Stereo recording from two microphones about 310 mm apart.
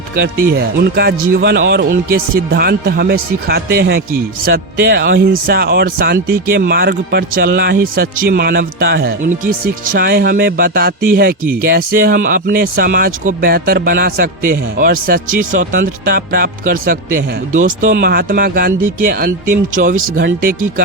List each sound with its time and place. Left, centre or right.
0.6 s a man's voice: right